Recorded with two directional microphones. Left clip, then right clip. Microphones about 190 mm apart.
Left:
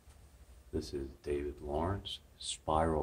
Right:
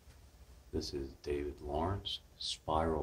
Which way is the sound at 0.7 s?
20° left (ahead or behind).